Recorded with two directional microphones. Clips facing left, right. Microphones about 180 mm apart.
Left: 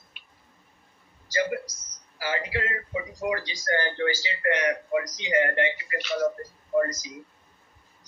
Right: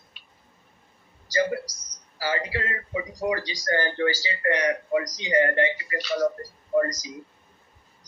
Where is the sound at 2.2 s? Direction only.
35° right (ahead or behind).